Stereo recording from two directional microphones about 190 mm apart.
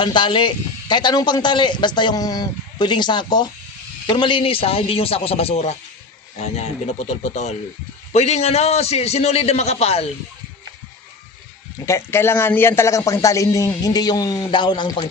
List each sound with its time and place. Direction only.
0.0 s a man's voice: 25° left (ahead or behind)
11.9 s a man's voice: 15° left (ahead or behind)